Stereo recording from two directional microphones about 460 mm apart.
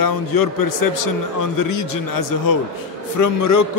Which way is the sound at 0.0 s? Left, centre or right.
Left.